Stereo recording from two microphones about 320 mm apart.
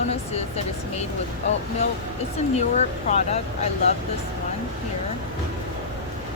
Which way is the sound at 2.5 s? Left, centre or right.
Left.